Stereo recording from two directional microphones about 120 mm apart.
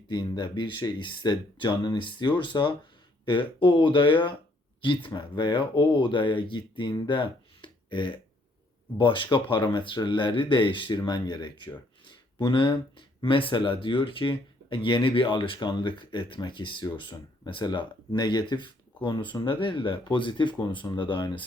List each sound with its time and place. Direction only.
0.1 s speech: 40° left (ahead or behind)